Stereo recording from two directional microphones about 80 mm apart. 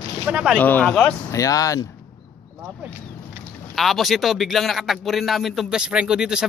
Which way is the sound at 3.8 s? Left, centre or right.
Centre.